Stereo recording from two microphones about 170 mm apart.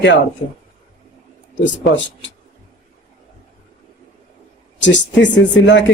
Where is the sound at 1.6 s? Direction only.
90° left.